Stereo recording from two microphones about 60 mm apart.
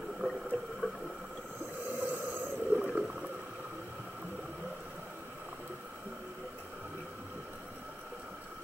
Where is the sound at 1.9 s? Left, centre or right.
Right.